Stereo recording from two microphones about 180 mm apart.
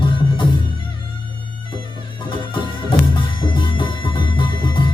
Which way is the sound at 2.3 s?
25° left (ahead or behind).